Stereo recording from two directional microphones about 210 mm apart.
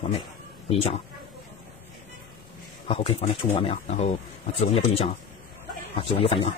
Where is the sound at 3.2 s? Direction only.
25° left (ahead or behind).